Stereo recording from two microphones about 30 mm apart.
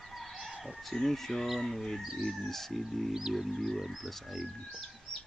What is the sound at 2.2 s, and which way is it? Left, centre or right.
Speech, centre.